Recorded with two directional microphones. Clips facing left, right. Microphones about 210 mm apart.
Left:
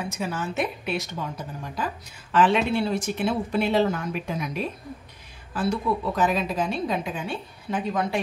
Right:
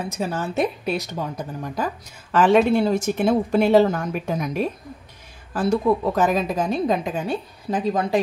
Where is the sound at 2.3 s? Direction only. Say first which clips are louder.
Right 5 dB; 45° right (ahead or behind).